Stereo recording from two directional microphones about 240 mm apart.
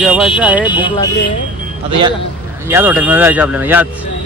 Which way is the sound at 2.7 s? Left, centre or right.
Centre.